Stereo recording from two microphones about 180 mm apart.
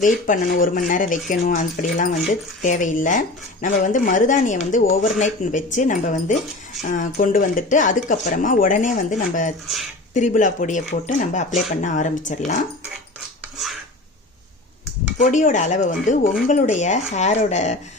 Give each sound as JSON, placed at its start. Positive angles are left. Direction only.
{"t": 0.0, "sound": "speech", "side_deg": 50}
{"t": 15.2, "sound": "speech", "side_deg": 45}